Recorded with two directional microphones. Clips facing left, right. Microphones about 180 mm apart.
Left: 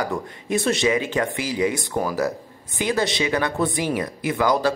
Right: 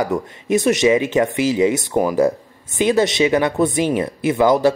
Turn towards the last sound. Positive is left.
turn(degrees=-20)  # may be behind; listen again after turning